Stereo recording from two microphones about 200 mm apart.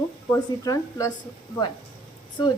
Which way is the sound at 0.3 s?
15° left (ahead or behind).